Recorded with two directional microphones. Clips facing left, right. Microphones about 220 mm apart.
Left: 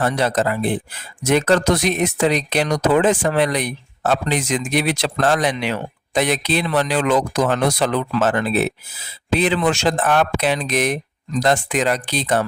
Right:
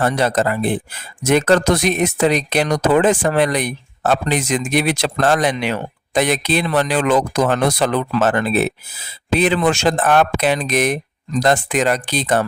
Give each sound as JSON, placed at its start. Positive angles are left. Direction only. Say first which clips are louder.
{"t": 0.0, "sound": "speech", "louder": "right 2 dB", "side_deg": -50}